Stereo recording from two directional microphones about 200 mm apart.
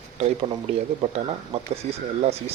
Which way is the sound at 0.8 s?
30° right (ahead or behind).